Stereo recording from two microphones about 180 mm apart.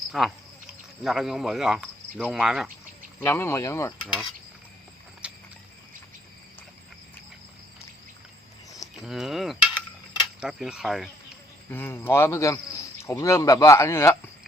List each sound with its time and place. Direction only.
0.1 s speech: centre (ahead or behind)
3.2 s speech: 15° left (ahead or behind)
5.2 s a sound: 5° right (ahead or behind)
9.0 s speech: centre (ahead or behind)
11.7 s speech: 10° left (ahead or behind)